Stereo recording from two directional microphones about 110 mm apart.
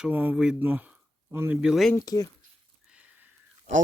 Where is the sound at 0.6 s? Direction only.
15° right (ahead or behind).